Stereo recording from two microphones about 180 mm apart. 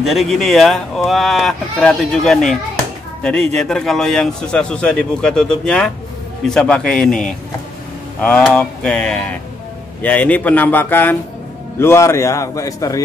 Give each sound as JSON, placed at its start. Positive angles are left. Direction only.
{"t": 0.0, "sound": "a man's voice", "side_deg": 0}